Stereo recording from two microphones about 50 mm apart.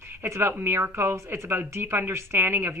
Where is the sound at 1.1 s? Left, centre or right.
Right.